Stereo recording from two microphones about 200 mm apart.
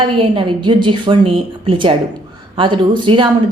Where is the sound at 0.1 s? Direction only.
25° right (ahead or behind).